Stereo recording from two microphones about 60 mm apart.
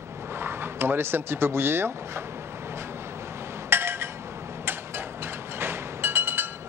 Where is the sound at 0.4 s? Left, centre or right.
Right.